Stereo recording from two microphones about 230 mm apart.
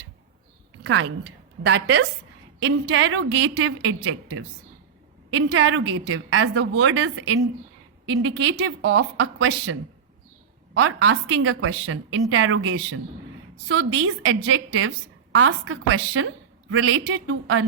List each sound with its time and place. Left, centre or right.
0.9 s a woman's voice: right
10.8 s a woman's voice: right